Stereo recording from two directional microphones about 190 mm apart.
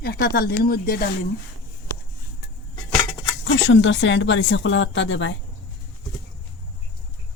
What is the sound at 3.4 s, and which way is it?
Speech, 70° left (ahead or behind).